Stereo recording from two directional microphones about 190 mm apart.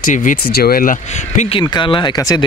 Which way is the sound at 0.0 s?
45° left (ahead or behind).